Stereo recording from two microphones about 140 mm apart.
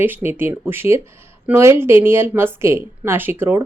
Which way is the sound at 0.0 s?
15° right (ahead or behind).